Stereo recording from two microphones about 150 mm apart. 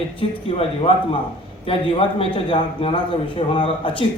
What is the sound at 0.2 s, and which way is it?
Speech, 40° left (ahead or behind).